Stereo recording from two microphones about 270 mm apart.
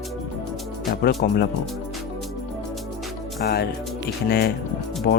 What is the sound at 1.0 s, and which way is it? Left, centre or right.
Speech, left.